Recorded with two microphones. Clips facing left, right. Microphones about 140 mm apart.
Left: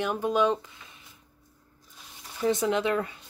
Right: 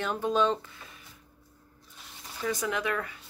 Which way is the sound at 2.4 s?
25° left (ahead or behind).